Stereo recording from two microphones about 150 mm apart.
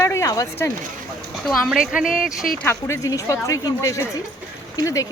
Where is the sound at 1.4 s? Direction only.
Centre (ahead or behind).